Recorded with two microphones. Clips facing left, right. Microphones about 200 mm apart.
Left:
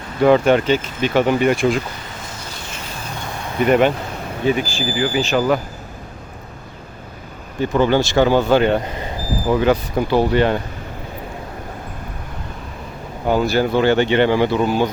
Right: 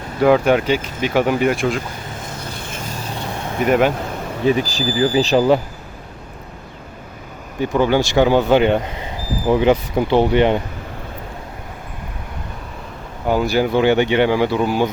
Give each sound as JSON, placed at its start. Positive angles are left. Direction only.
{"t": 0.2, "sound": "speech", "side_deg": -10}
{"t": 2.2, "sound": "vehicle", "side_deg": -55}
{"t": 3.6, "sound": "speech", "side_deg": -5}
{"t": 4.4, "sound": "speech", "side_deg": -35}
{"t": 7.6, "sound": "speech", "side_deg": -10}
{"t": 13.2, "sound": "speech", "side_deg": -10}